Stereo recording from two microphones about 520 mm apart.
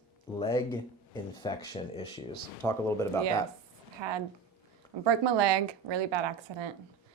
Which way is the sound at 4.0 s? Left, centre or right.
Right.